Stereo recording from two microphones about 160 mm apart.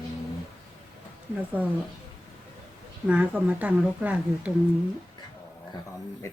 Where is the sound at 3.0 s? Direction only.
10° right (ahead or behind).